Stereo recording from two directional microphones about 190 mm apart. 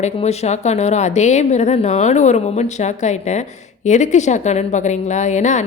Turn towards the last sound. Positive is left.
turn(degrees=40)  # may be behind; listen again after turning